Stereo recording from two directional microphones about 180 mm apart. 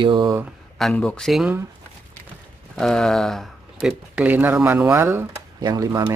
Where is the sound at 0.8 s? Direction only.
5° left (ahead or behind).